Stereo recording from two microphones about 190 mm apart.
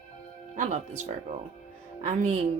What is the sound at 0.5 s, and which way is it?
Speech, 40° right (ahead or behind).